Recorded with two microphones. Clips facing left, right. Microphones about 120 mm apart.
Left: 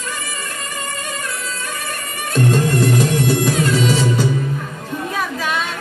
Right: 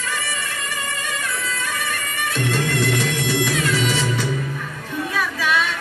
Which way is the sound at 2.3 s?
40° left (ahead or behind).